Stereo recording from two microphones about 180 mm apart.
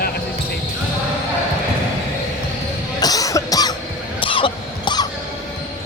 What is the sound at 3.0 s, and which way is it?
Music, 20° left (ahead or behind).